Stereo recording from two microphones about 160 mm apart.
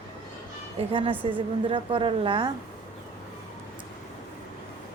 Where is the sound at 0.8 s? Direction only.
35° right (ahead or behind).